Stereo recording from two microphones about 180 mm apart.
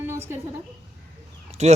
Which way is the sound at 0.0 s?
15° right (ahead or behind).